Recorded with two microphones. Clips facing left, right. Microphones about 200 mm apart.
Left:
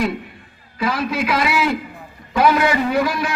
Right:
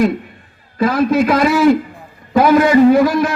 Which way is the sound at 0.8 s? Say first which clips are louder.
Right 8 dB; 50° right (ahead or behind).